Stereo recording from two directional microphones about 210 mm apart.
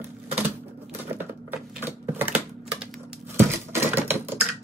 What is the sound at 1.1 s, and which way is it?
Typing, 10° right (ahead or behind).